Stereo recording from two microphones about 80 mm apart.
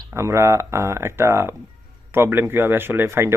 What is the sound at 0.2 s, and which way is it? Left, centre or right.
Speech, right.